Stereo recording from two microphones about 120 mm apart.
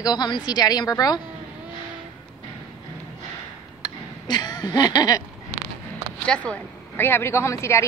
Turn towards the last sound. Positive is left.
turn(degrees=25)  # may be behind; listen again after turning